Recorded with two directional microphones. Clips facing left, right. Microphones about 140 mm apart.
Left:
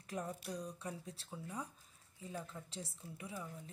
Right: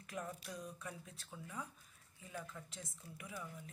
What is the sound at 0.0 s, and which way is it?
Speech, 35° left (ahead or behind).